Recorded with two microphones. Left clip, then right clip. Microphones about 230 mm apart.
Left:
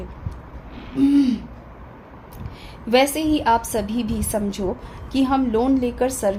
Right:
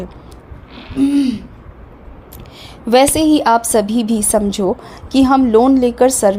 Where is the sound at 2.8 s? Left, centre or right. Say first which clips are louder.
Right 7 dB; right.